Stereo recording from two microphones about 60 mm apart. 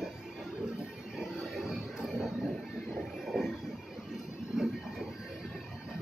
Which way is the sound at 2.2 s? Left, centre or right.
Centre.